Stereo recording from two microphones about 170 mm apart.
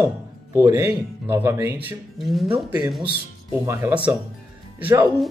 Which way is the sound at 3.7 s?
15° right (ahead or behind).